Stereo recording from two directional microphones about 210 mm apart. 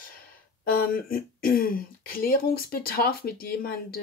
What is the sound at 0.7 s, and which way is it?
Speech, 45° left (ahead or behind).